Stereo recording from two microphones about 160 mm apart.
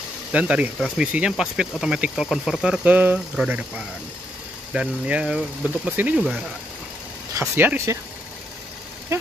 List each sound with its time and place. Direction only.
0.3 s speech: 10° right (ahead or behind)
7.3 s speech: 15° right (ahead or behind)
9.1 s speech: 15° right (ahead or behind)